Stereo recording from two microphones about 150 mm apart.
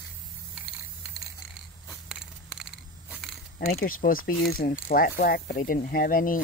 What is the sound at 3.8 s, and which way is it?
Speech, 75° left (ahead or behind).